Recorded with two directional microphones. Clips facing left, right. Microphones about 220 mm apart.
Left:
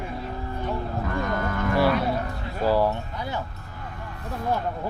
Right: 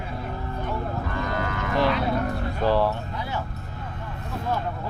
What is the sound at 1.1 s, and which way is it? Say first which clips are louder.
Cattle: left 3 dB; 50° left (ahead or behind).